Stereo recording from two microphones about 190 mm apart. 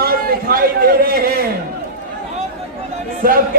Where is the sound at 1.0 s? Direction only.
50° right (ahead or behind).